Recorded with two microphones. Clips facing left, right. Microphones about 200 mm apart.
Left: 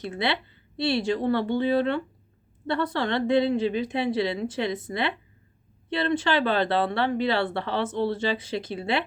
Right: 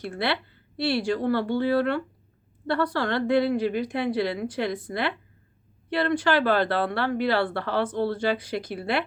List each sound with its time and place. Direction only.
0.0 s a woman's voice: 20° left (ahead or behind)